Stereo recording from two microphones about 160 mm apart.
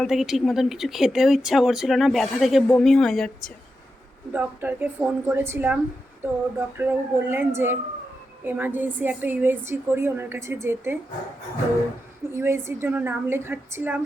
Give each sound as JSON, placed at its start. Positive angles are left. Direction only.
{"t": 0.0, "sound": "speech", "side_deg": 0}
{"t": 4.3, "sound": "a woman's voice", "side_deg": -10}
{"t": 12.3, "sound": "a woman's voice", "side_deg": -15}